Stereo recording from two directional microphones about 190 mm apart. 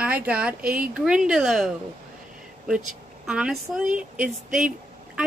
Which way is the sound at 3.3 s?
5° right (ahead or behind).